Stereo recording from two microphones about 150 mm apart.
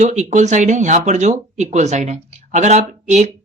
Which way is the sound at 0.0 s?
55° right (ahead or behind).